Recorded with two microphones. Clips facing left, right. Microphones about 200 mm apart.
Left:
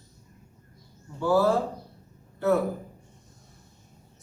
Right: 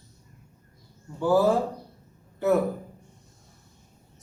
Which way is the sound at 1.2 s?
15° right (ahead or behind).